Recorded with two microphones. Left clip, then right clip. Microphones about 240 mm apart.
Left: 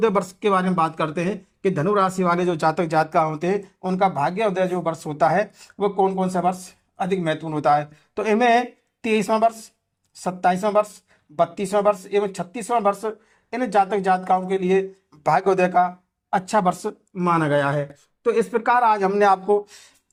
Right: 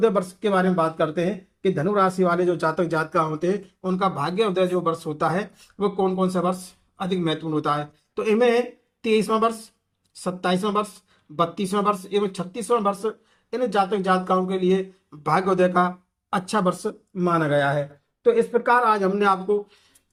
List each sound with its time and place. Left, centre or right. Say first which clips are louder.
0.0 s speech: left 1 dB; left